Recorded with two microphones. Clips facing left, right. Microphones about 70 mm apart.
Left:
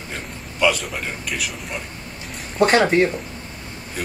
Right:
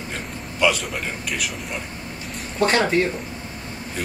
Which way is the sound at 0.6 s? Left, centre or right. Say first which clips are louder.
Left 1 dB; centre.